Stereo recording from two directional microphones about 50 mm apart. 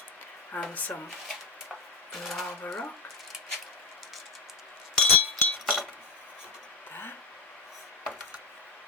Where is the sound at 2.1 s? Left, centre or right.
Centre.